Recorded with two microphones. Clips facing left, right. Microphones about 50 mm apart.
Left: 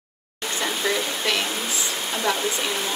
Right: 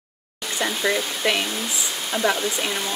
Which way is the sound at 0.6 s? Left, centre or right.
Centre.